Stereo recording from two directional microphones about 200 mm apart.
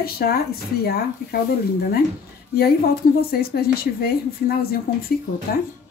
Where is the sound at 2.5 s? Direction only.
50° left (ahead or behind).